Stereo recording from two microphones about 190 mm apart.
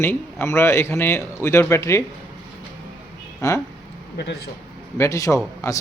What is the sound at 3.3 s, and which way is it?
Speech, 15° left (ahead or behind).